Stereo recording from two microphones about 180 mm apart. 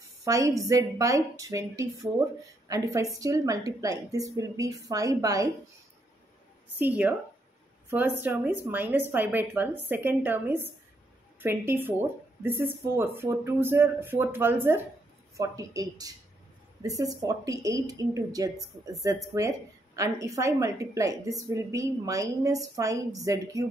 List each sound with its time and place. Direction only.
0.2 s a woman's voice: 20° right (ahead or behind)
6.8 s a woman's voice: 10° right (ahead or behind)